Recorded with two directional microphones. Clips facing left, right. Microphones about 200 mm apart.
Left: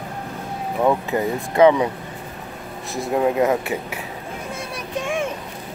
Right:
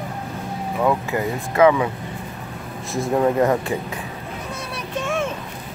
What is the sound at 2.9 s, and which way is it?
Speech, 5° left (ahead or behind).